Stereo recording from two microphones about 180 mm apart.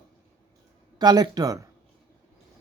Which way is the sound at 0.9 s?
20° right (ahead or behind).